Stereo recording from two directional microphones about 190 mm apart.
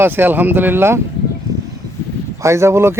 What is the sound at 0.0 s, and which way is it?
Speech, 10° right (ahead or behind).